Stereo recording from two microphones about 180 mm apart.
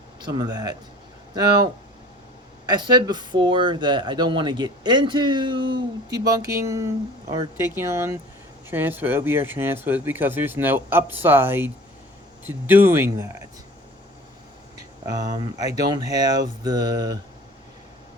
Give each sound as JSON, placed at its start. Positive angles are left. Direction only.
{"t": 0.2, "sound": "speech", "side_deg": -20}
{"t": 14.8, "sound": "speech", "side_deg": -20}